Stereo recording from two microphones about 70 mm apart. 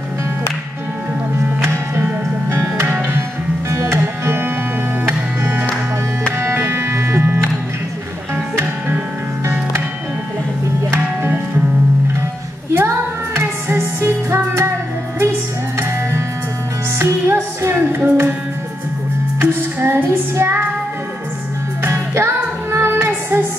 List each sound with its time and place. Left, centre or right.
3.0 s music: right
6.3 s music: right
10.9 s music: right
12.7 s music: right
17.0 s music: right
19.4 s music: right
21.8 s music: right